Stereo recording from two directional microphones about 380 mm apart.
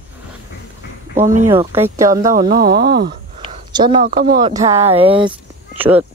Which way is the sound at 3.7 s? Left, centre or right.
Centre.